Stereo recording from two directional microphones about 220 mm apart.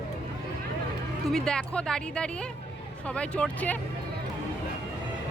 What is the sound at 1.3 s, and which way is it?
Speech, 5° left (ahead or behind).